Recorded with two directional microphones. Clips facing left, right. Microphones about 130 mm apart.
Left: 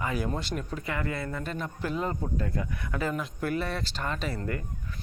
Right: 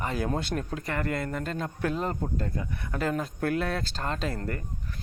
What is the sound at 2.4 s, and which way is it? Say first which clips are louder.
Speech: left 1 dB; 30° right (ahead or behind).